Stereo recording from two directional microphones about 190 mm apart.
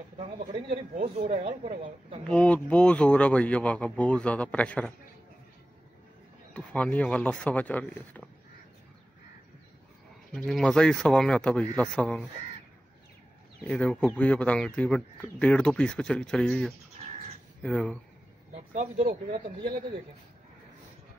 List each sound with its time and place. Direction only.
0.9 s speech: 35° right (ahead or behind)
2.2 s speech: 5° left (ahead or behind)
6.5 s speech: 5° left (ahead or behind)
10.3 s speech: 5° left (ahead or behind)
13.7 s speech: 5° left (ahead or behind)
18.5 s speech: 40° right (ahead or behind)